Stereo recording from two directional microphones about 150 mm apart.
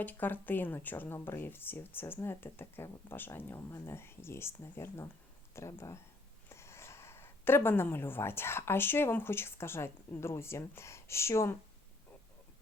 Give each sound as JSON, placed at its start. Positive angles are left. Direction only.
{"t": 0.0, "sound": "a woman's voice", "side_deg": 10}